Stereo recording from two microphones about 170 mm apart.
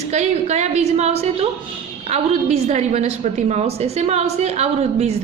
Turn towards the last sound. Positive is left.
turn(degrees=-40)  # may be behind; listen again after turning